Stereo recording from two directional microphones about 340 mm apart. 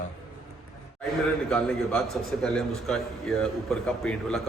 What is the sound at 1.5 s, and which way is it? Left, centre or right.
A man's voice, centre.